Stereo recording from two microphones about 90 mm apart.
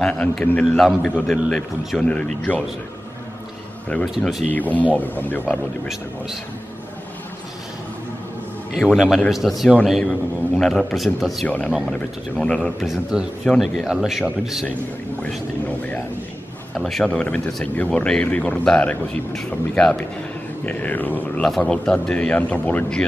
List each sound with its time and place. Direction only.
0.0 s a man's voice: 10° left (ahead or behind)
4.5 s a man's voice: 20° left (ahead or behind)
8.7 s a man's voice: 5° right (ahead or behind)
11.4 s a man's voice: 15° left (ahead or behind)
12.8 s a man's voice: 5° right (ahead or behind)
16.7 s a man's voice: 5° left (ahead or behind); by 21.5 s 20° left (ahead or behind)
21.5 s a man's voice: 5° left (ahead or behind)